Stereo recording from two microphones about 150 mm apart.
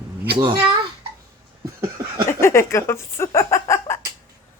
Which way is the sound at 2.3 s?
15° left (ahead or behind).